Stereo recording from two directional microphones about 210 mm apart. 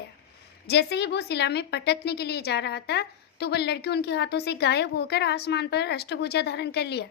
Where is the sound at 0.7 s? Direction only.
55° left (ahead or behind).